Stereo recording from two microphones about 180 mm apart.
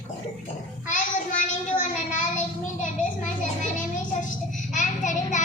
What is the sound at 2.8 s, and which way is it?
Children playing, 45° left (ahead or behind).